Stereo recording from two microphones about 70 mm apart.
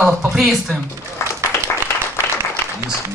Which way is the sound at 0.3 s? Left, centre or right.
Centre.